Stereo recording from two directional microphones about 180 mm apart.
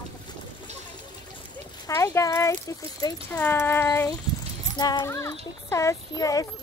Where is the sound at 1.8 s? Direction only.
15° left (ahead or behind).